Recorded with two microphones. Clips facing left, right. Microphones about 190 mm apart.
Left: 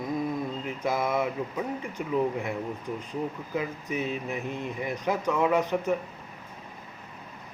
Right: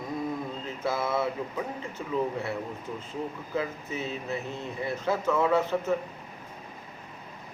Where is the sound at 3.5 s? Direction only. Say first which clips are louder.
Left 1 dB; 15° left (ahead or behind).